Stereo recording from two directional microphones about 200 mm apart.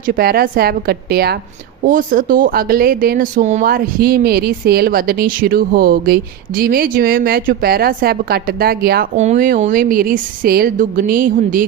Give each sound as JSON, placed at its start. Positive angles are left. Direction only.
{"t": 0.1, "sound": "speech", "side_deg": -50}
{"t": 9.1, "sound": "speech", "side_deg": -35}